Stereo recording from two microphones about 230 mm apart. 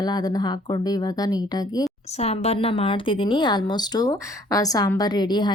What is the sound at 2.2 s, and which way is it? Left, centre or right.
Speech, left.